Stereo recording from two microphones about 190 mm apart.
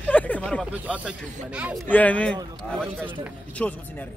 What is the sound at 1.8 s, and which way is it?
Speech, 10° left (ahead or behind).